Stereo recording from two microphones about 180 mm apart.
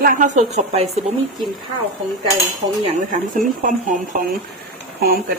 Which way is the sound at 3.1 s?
45° right (ahead or behind).